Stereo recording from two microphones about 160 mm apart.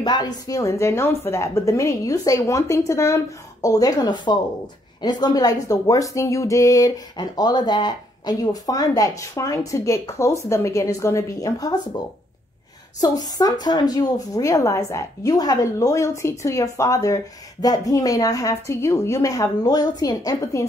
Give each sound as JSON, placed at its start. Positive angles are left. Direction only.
{"t": 0.0, "sound": "a woman's voice", "side_deg": 25}